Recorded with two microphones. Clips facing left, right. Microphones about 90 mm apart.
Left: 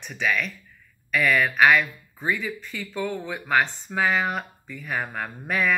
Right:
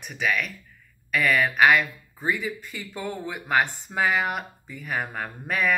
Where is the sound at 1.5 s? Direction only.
15° right (ahead or behind).